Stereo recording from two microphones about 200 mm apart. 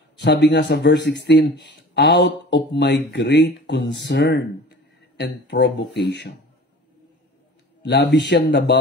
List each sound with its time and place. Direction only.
0.2 s speech: 60° left (ahead or behind)
7.8 s speech: 55° left (ahead or behind)